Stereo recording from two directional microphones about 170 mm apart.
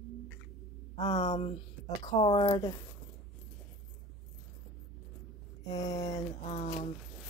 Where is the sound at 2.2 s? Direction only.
30° left (ahead or behind).